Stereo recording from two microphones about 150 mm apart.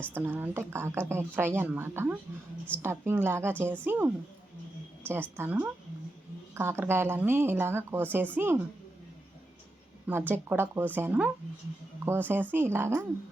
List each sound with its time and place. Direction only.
0.1 s a woman's voice: 15° right (ahead or behind)
5.4 s a woman's voice: 10° right (ahead or behind)
10.1 s a woman's voice: 15° right (ahead or behind)